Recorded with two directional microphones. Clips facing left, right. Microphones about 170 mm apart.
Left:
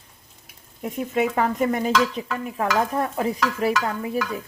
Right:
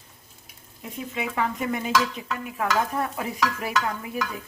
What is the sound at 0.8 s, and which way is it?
Stir, 50° left (ahead or behind).